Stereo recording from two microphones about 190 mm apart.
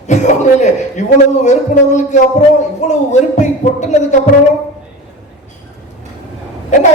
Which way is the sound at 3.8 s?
35° left (ahead or behind).